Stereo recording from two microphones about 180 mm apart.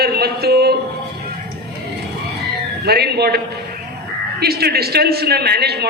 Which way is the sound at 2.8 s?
60° right (ahead or behind).